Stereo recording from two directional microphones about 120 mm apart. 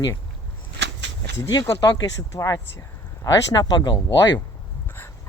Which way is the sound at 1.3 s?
25° left (ahead or behind).